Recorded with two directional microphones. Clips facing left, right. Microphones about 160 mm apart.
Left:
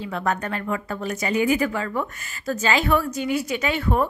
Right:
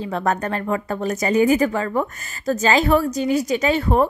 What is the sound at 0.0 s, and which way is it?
Speech, 40° right (ahead or behind).